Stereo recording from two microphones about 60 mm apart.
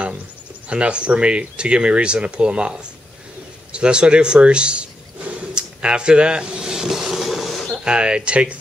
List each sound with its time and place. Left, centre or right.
0.7 s speech: centre
3.7 s a sound: centre
7.7 s speech: centre